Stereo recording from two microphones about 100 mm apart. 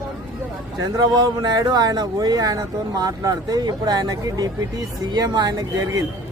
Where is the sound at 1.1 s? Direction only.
40° right (ahead or behind).